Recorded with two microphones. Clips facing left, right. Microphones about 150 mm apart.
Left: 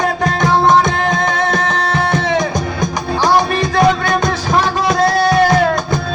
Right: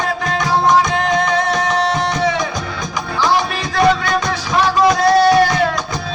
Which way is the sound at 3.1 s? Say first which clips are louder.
Left 3 dB; 45° left (ahead or behind).